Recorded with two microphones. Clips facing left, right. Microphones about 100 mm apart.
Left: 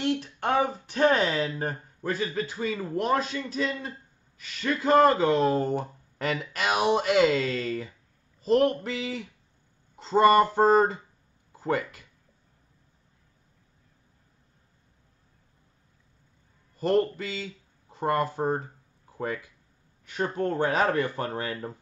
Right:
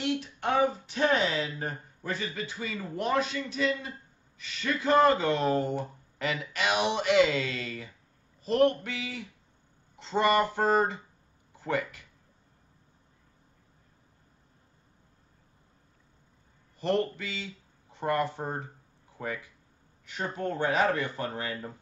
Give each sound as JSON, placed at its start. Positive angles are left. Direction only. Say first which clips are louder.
{"t": 0.0, "sound": "speech", "louder": "left 3 dB", "side_deg": 45}
{"t": 16.8, "sound": "speech", "louder": "left 4 dB", "side_deg": 35}
{"t": 20.3, "sound": "speech", "louder": "left 2 dB", "side_deg": 40}